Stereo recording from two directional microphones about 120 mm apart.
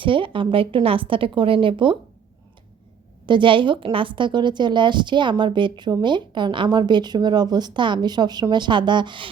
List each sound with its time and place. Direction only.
0.0 s a woman's voice: 45° right (ahead or behind)
3.2 s a woman's voice: 40° right (ahead or behind)